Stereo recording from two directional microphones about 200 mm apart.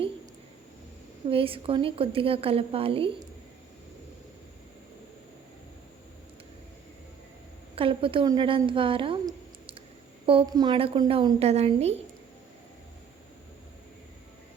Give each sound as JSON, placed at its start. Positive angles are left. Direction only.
{"t": 1.3, "sound": "a woman's voice", "side_deg": -25}
{"t": 7.8, "sound": "a woman's voice", "side_deg": -25}